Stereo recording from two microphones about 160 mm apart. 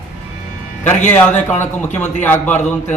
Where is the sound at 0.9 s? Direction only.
10° left (ahead or behind).